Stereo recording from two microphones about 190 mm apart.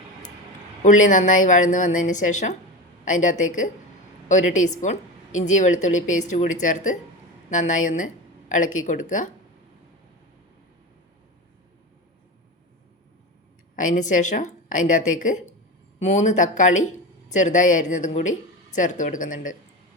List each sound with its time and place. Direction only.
0.8 s a woman's voice: 40° left (ahead or behind)
13.7 s a woman's voice: 45° left (ahead or behind)